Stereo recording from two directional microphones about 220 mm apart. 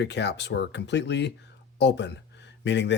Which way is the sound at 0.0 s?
50° left (ahead or behind).